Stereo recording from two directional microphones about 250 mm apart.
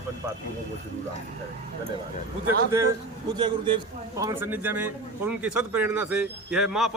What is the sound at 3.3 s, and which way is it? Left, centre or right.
A man's voice, centre.